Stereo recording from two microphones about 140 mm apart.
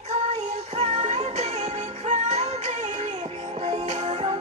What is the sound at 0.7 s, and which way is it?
Music, 45° right (ahead or behind).